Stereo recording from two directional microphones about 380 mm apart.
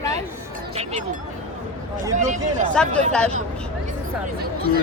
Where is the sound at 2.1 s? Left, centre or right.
Centre.